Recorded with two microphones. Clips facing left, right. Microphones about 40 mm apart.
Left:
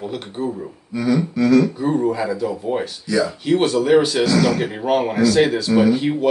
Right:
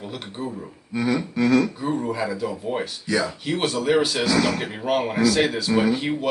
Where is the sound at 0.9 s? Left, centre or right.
Right.